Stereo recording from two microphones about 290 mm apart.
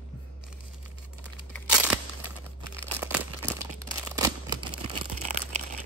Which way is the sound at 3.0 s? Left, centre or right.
Centre.